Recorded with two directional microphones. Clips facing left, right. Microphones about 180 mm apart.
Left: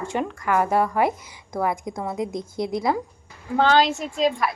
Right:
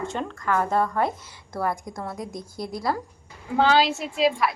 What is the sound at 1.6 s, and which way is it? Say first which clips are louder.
Speech: left 3 dB; 20° left (ahead or behind).